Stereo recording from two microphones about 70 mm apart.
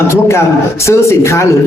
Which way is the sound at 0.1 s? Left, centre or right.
Left.